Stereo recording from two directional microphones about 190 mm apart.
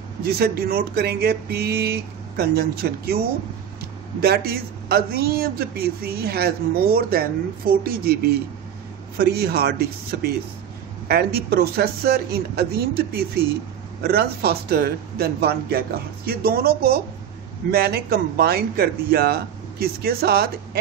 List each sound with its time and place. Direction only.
0.2 s a man's voice: 55° right (ahead or behind)
4.2 s a man's voice: 55° right (ahead or behind)